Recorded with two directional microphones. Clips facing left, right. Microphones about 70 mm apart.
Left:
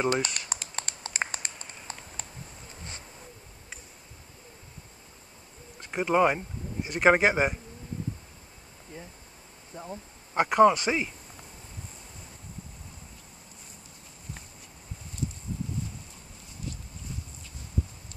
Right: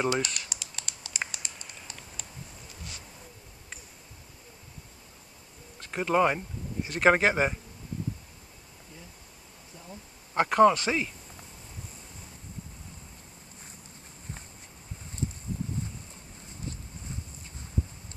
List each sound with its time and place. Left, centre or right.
0.1 s speech: left
0.5 s a sound: left
5.8 s speech: centre
9.7 s speech: left
10.3 s speech: centre